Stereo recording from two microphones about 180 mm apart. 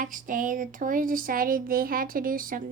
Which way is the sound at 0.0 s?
50° right (ahead or behind).